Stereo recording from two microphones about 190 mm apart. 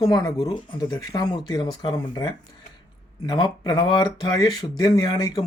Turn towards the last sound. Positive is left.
turn(degrees=20)  # may be behind; listen again after turning